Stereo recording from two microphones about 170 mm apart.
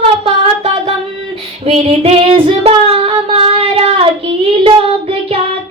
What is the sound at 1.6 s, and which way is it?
Child singing, 35° right (ahead or behind).